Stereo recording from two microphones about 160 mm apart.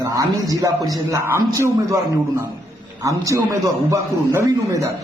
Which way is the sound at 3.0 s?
20° right (ahead or behind).